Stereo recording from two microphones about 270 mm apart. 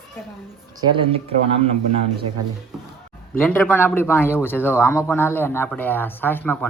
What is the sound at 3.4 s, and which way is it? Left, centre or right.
Speech, centre.